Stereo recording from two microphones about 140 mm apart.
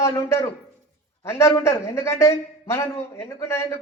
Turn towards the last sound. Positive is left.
turn(degrees=20)  # may be behind; listen again after turning